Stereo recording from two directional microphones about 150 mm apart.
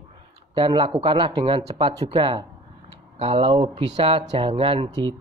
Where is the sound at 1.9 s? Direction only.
30° right (ahead or behind).